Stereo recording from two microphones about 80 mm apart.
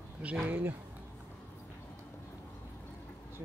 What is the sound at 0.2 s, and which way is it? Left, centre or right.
Speech, centre.